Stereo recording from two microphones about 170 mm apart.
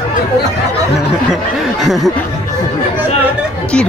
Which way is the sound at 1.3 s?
Centre (ahead or behind).